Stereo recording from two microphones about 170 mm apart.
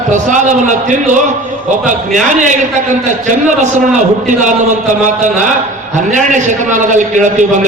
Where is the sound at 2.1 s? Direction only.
50° right (ahead or behind).